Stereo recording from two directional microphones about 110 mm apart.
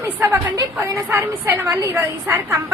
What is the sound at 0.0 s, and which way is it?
A woman's voice, 25° right (ahead or behind).